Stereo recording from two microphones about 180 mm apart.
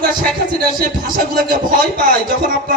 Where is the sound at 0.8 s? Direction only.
50° right (ahead or behind).